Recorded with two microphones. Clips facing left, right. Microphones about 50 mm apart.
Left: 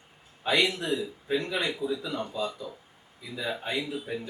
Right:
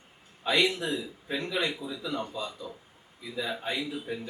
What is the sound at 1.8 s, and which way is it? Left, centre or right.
Speech, left.